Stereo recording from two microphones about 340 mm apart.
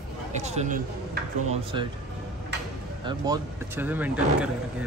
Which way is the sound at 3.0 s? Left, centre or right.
Centre.